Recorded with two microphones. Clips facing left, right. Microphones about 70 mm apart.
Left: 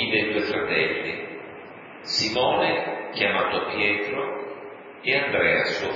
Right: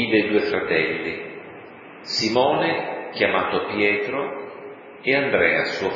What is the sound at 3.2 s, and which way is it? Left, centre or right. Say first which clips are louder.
Speech: right 3 dB; right.